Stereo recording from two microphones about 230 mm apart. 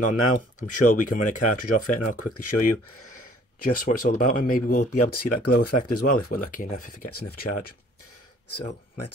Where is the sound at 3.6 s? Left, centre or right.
Left.